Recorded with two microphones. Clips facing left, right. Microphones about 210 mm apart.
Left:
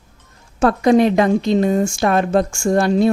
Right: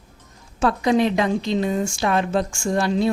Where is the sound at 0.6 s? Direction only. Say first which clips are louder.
Left 5 dB; 50° left (ahead or behind).